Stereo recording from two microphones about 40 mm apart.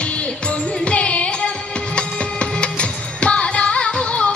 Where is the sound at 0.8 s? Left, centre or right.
Left.